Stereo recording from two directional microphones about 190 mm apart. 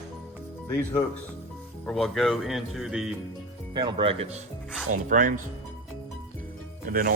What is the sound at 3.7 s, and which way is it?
Speech, 25° right (ahead or behind).